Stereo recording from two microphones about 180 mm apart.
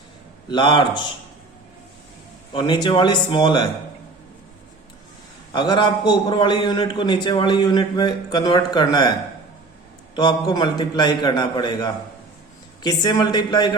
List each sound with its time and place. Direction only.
0.4 s a man's voice: 25° left (ahead or behind)
2.5 s a man's voice: 25° left (ahead or behind)
5.5 s a man's voice: 25° left (ahead or behind)
10.2 s a man's voice: 25° left (ahead or behind)